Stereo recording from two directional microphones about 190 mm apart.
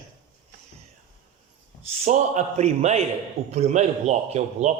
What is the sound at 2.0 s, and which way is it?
Speech, 40° right (ahead or behind).